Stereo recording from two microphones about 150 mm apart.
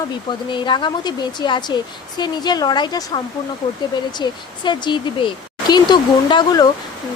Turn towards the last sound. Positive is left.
turn(degrees=30)  # may be behind; listen again after turning